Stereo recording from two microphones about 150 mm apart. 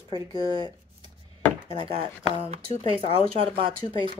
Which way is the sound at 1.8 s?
35° right (ahead or behind).